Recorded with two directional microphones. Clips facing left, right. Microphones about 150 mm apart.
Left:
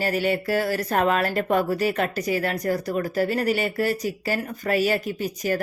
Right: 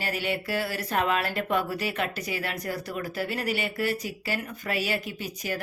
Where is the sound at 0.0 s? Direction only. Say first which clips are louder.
Left 7 dB; 40° left (ahead or behind).